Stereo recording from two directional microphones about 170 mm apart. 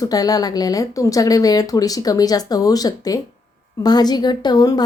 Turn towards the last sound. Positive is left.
turn(degrees=20)  # may be behind; listen again after turning